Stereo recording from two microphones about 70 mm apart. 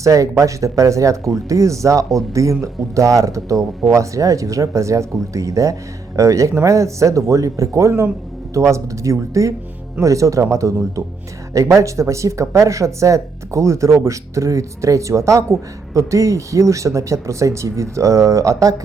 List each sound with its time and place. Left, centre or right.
0.0 s speech: right